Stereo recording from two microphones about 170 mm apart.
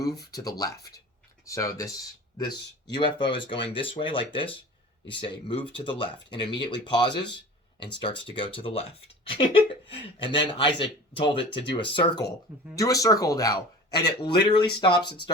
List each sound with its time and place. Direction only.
0.0 s speech: 20° left (ahead or behind)